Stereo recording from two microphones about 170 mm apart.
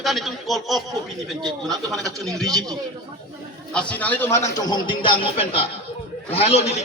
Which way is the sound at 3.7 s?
5° left (ahead or behind).